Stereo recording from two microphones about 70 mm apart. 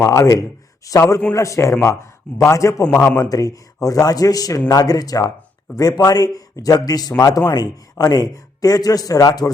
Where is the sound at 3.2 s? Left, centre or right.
Left.